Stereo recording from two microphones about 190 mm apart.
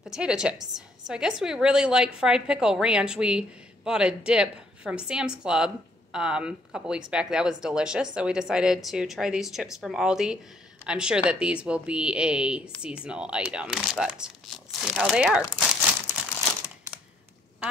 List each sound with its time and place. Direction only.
0.0 s a woman's voice: 5° right (ahead or behind)